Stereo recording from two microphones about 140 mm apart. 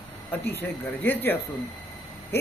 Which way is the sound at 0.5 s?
15° left (ahead or behind).